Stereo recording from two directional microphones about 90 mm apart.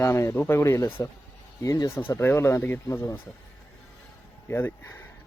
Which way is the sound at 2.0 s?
25° left (ahead or behind).